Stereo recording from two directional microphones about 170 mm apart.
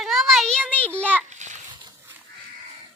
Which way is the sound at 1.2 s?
45° right (ahead or behind).